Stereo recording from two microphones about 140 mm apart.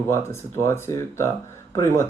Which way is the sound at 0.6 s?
20° left (ahead or behind).